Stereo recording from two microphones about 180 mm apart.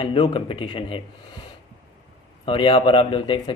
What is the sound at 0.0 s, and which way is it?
A man's voice, 30° left (ahead or behind).